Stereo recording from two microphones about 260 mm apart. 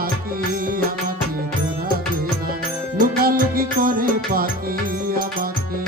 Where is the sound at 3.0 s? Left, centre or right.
Right.